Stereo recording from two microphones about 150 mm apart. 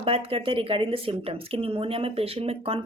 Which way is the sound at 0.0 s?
40° right (ahead or behind).